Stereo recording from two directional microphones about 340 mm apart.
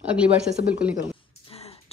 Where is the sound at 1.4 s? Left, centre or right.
Centre.